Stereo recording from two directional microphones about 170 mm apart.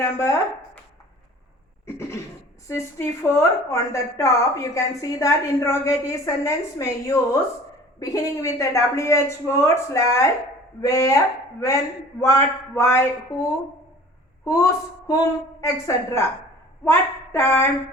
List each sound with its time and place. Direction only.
0.0 s a woman's voice: 15° left (ahead or behind)
1.9 s cough: 15° left (ahead or behind)
2.6 s a woman's voice: 15° left (ahead or behind)
12.2 s a woman's voice: 15° left (ahead or behind)